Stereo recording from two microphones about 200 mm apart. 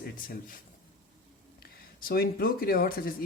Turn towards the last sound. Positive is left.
turn(degrees=45)  # may be behind; listen again after turning